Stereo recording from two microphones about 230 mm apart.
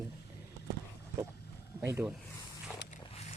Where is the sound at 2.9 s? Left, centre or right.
Left.